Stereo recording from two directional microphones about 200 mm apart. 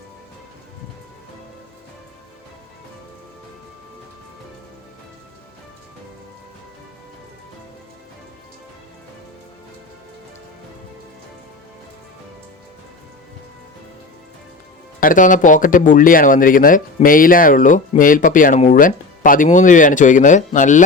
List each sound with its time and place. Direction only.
15.0 s speech: 40° left (ahead or behind)